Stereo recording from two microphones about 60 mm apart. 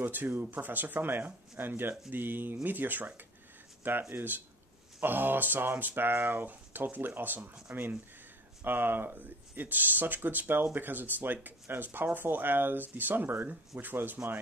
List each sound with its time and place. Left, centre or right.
0.0 s speech: right